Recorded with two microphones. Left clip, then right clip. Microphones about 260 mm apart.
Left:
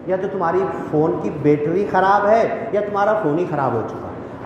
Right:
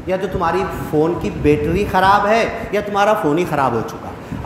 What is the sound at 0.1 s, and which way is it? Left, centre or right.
Speech, right.